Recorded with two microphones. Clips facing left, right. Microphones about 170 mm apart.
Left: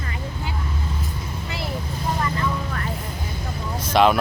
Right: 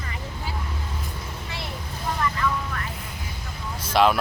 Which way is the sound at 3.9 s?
Centre (ahead or behind).